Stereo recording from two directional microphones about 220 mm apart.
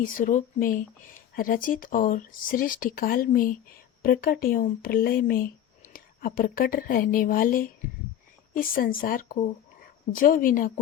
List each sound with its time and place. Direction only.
0.0 s a woman's voice: 40° left (ahead or behind)